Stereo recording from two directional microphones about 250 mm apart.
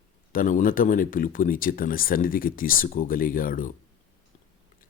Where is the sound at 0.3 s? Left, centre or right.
Left.